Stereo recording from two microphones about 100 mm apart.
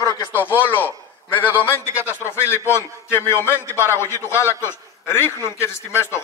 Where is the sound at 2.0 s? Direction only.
25° left (ahead or behind).